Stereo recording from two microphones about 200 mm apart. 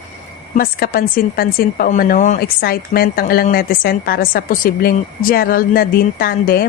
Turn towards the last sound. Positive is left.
turn(degrees=45)  # may be behind; listen again after turning